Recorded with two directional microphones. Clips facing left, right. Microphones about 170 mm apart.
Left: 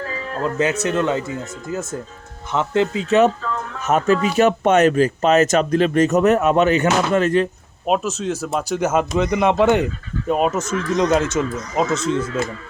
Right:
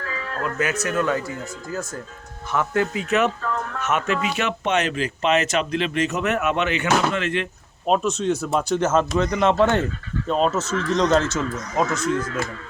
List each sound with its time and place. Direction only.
0.0 s speech: 30° left (ahead or behind)
7.9 s speech: 5° left (ahead or behind); by 12.2 s 25° left (ahead or behind)